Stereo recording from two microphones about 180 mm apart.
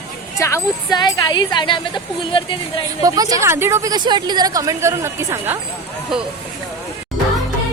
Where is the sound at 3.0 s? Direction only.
20° right (ahead or behind).